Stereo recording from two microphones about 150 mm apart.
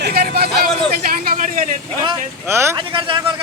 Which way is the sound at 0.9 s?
85° right.